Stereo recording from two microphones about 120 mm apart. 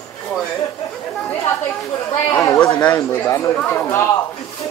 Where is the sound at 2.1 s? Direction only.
30° left (ahead or behind).